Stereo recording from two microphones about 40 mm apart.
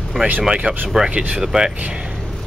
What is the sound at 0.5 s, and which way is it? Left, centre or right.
Speech, right.